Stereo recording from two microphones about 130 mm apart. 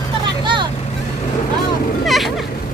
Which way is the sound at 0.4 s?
35° right (ahead or behind).